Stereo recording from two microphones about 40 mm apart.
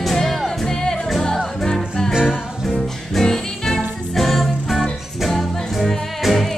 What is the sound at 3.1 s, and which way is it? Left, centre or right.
Music, centre.